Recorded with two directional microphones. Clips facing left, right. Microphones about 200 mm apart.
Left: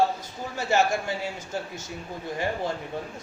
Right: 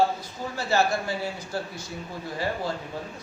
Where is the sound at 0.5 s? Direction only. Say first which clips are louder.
Left 1 dB; 20° left (ahead or behind).